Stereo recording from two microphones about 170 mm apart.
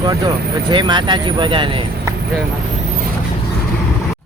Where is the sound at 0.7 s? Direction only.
25° right (ahead or behind).